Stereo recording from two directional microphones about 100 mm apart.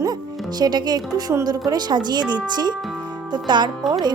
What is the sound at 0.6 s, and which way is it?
Speech, 45° right (ahead or behind).